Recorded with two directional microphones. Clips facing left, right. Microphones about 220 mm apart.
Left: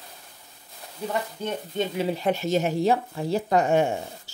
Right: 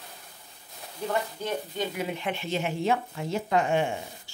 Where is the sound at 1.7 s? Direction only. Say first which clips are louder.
Left 5 dB; 25° left (ahead or behind); by 4.3 s 40° left (ahead or behind).